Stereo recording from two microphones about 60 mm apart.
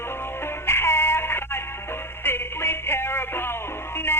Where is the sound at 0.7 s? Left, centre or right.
Left.